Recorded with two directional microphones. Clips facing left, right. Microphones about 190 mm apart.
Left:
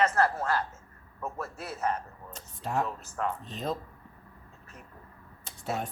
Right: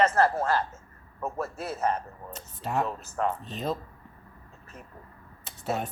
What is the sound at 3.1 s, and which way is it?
Speech, 40° right (ahead or behind).